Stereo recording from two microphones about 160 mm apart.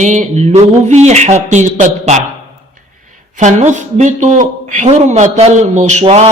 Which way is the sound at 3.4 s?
50° right (ahead or behind).